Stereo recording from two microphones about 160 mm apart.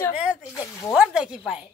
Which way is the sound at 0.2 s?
5° right (ahead or behind).